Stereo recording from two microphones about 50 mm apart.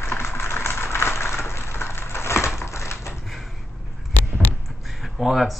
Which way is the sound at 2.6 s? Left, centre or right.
Left.